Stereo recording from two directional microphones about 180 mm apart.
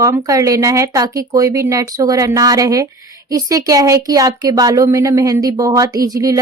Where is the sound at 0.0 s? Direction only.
20° right (ahead or behind).